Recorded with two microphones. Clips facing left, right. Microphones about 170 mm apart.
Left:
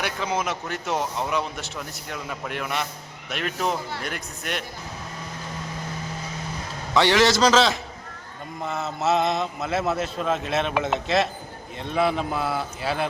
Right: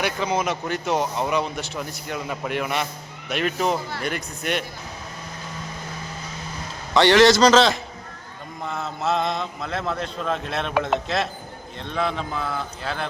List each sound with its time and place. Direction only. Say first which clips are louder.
0.0 s speech: right 3 dB; centre (ahead or behind)
6.9 s a man's voice: right 4 dB; centre (ahead or behind)